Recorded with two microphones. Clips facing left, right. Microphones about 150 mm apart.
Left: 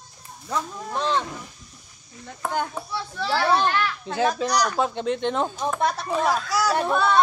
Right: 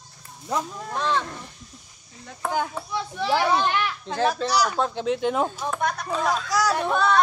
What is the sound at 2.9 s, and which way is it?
A child's voice, 20° right (ahead or behind).